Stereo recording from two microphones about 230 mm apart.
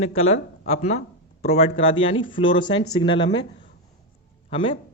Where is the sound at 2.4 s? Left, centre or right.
Left.